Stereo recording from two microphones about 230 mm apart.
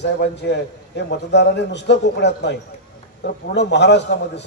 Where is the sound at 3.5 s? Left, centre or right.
Left.